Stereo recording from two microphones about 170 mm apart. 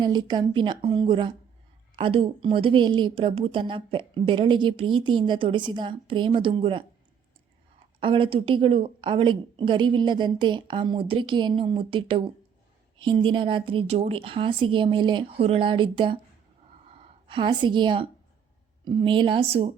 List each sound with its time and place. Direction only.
0.0 s a woman's voice: 25° right (ahead or behind)
7.9 s a woman's voice: 30° right (ahead or behind)